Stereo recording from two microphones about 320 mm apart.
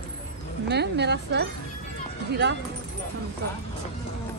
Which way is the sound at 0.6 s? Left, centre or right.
Right.